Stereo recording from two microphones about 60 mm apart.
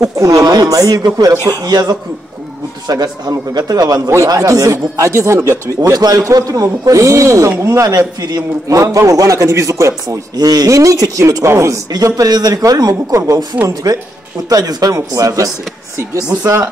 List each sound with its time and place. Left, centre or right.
0.0 s a man's voice: right
8.2 s speech: right
10.3 s a man's voice: right